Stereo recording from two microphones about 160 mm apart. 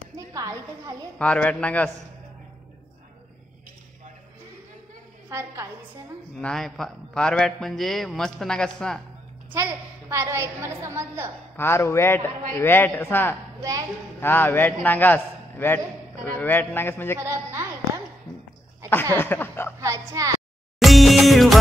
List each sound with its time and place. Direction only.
0.3 s a woman's voice: 20° right (ahead or behind)
1.1 s a man's voice: 10° left (ahead or behind)
5.3 s a woman's voice: 15° right (ahead or behind)
6.3 s a man's voice: 5° left (ahead or behind)
9.5 s a woman's voice: 15° right (ahead or behind)
11.5 s a man's voice: 15° left (ahead or behind)
13.6 s a woman's voice: 20° right (ahead or behind)
14.2 s a man's voice: 15° left (ahead or behind)
17.2 s speech: 15° right (ahead or behind)
19.1 s a man's voice: 15° left (ahead or behind)
19.8 s a woman's voice: 20° right (ahead or behind)
20.8 s music: centre (ahead or behind)